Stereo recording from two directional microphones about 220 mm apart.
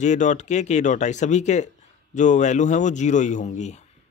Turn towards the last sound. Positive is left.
turn(degrees=35)  # may be behind; listen again after turning